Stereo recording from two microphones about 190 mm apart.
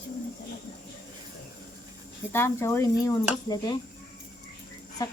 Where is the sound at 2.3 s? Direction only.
10° left (ahead or behind).